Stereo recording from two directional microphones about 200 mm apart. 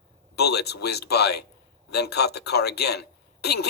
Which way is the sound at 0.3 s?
55° left (ahead or behind).